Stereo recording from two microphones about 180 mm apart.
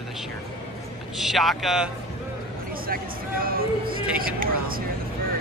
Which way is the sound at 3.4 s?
55° right (ahead or behind).